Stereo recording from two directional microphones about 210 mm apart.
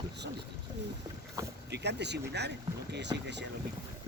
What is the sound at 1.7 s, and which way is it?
Speech, 55° right (ahead or behind).